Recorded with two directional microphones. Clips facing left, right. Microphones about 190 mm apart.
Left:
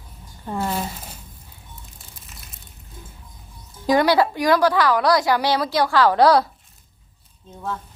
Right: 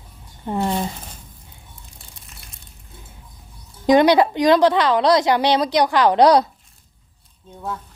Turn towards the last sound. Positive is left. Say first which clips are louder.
# right 2 dB
turn(degrees=-20)  # may be behind; listen again after turning